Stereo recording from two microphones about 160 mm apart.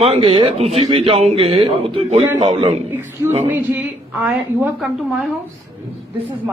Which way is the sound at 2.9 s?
15° right (ahead or behind).